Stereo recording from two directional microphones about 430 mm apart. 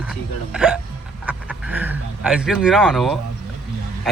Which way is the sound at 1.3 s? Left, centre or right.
Centre.